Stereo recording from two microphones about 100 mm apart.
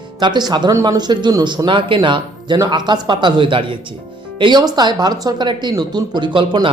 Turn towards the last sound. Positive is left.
turn(degrees=-55)  # may be behind; listen again after turning